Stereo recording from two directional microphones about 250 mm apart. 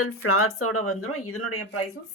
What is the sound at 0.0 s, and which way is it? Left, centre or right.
Speech, left.